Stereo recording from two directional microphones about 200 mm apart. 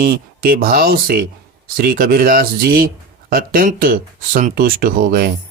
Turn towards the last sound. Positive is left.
turn(degrees=-45)  # may be behind; listen again after turning